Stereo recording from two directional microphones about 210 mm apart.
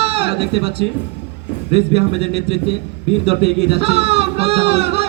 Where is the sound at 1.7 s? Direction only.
25° right (ahead or behind).